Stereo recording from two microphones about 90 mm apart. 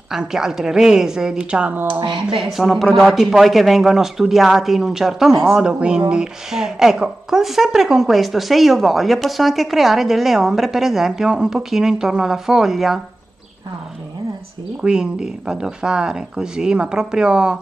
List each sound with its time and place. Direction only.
0.1 s speech: 5° right (ahead or behind)
2.0 s speech: 50° right (ahead or behind)
2.3 s speech: centre (ahead or behind)
14.8 s speech: 10° right (ahead or behind)